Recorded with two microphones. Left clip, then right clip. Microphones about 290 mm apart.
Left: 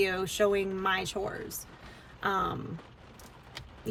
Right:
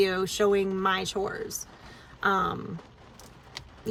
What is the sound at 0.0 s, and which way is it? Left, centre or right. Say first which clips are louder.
Speech: right 3 dB; centre.